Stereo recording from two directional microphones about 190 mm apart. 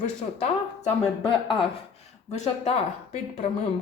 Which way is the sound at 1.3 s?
25° left (ahead or behind).